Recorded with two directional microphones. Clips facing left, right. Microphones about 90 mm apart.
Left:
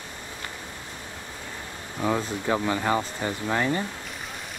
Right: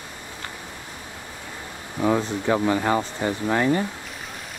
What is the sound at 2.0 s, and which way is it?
Speech, 20° right (ahead or behind).